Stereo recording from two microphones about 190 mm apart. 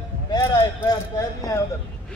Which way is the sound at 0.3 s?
20° left (ahead or behind).